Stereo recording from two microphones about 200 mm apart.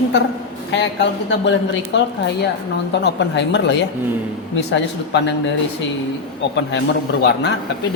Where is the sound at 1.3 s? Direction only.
60° left (ahead or behind).